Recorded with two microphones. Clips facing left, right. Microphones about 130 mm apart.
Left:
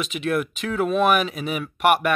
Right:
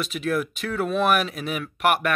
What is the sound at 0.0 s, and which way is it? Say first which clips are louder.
Speech: left 1 dB; centre (ahead or behind).